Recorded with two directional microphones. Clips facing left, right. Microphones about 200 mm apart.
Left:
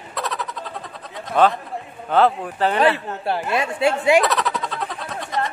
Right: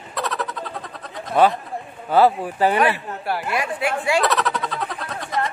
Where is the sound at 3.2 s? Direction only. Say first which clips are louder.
Left 2 dB; 25° left (ahead or behind).